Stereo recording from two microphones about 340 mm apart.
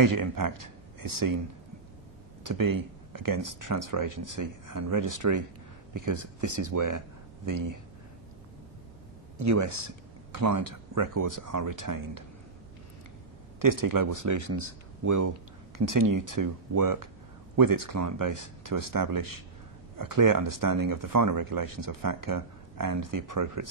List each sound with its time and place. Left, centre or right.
0.0 s speech: right
2.4 s speech: right
9.4 s speech: right
13.6 s speech: right
17.9 s speech: right